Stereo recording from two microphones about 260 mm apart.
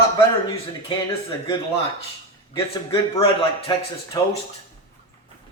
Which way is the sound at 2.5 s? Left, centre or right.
Centre.